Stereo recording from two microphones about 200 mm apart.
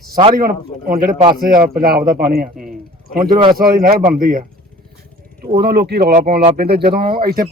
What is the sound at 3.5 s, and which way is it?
Speech, 45° right (ahead or behind).